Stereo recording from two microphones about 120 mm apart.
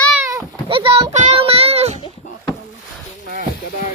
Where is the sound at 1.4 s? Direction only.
55° right (ahead or behind).